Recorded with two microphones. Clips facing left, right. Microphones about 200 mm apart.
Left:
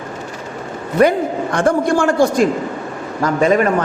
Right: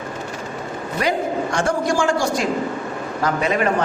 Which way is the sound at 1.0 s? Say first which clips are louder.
Left 8 dB; 55° left (ahead or behind).